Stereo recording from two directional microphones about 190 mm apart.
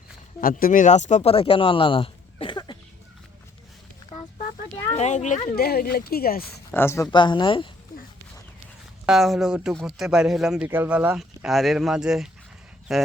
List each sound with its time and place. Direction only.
0.4 s speech: 45° left (ahead or behind); by 2.7 s 25° left (ahead or behind)
4.1 s a sound: 25° left (ahead or behind)
4.9 s a sound: 40° left (ahead or behind)
5.5 s speech: 55° left (ahead or behind)
6.7 s speech: 10° left (ahead or behind)
9.0 s speech: centre (ahead or behind)